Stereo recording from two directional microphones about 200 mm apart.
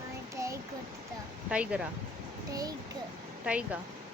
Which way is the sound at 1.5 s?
5° right (ahead or behind).